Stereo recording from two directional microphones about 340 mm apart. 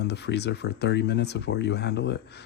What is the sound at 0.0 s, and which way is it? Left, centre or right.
Speech, left.